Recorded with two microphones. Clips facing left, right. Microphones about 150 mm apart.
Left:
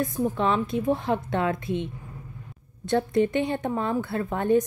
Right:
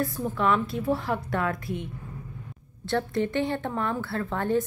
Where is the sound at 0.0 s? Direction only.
20° left (ahead or behind).